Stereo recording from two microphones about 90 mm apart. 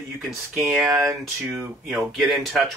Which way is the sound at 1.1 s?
30° right (ahead or behind).